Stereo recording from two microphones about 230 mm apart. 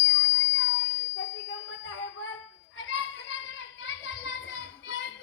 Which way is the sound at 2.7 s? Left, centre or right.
Left.